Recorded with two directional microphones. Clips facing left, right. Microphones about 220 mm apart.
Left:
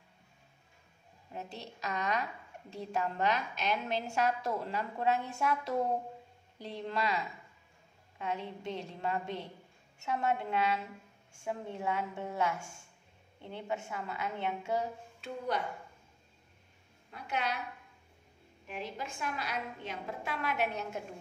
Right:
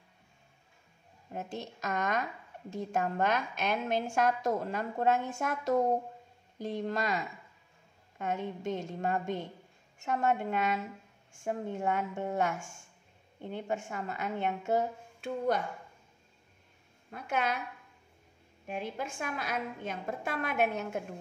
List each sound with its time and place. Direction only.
1.3 s a woman's voice: 50° right (ahead or behind)
17.1 s a woman's voice: 50° right (ahead or behind)
18.8 s a woman's voice: 50° right (ahead or behind)